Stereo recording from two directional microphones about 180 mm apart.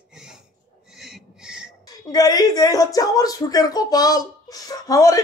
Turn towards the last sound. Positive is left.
turn(degrees=20)  # may be behind; listen again after turning